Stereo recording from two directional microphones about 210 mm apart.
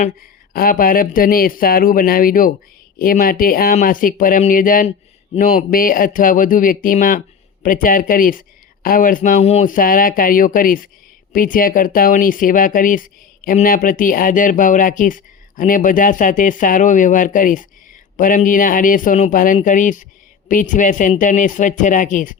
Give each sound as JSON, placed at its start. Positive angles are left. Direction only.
{"t": 0.0, "sound": "speech", "side_deg": 45}